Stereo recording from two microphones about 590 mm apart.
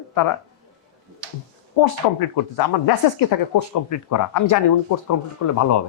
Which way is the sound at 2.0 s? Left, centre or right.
Left.